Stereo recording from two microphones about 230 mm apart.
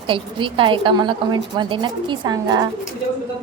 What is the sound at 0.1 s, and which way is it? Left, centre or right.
Speech, right.